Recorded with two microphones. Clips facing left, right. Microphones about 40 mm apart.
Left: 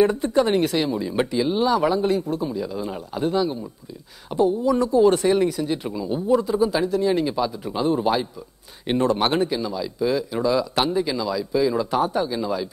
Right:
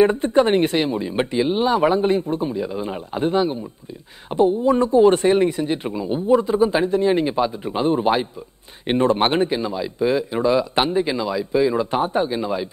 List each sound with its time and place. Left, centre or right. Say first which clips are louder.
0.0 s a man's voice: right 3 dB; right